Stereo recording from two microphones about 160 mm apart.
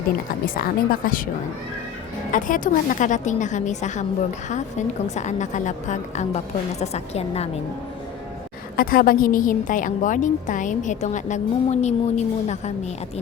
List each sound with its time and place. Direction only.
0.4 s speech: 65° left (ahead or behind)
2.3 s a woman's voice: 55° left (ahead or behind)
5.1 s a woman's voice: 45° left (ahead or behind)
8.7 s a woman's voice: 65° left (ahead or behind); by 12.7 s 45° left (ahead or behind)